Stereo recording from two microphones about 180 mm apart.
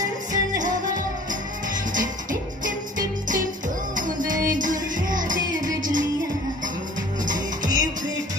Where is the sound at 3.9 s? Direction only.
45° right (ahead or behind).